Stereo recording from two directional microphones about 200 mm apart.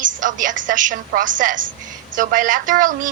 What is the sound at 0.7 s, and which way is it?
Speech, 40° right (ahead or behind).